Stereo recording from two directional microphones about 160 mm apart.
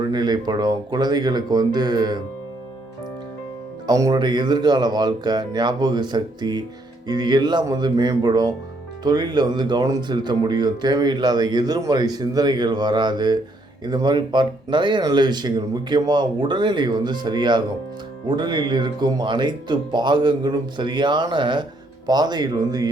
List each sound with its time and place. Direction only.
0.0 s speech: 25° right (ahead or behind)
3.8 s speech: 25° right (ahead or behind)